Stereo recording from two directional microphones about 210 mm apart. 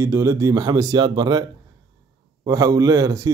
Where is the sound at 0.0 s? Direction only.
15° right (ahead or behind).